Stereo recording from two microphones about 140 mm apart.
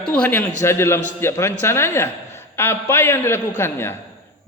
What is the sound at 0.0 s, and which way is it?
A man's voice, 10° left (ahead or behind).